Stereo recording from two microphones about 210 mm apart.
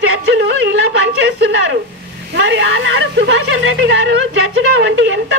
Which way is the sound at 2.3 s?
55° right (ahead or behind).